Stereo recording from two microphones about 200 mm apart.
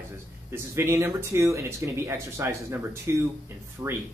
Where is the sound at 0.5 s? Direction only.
15° right (ahead or behind).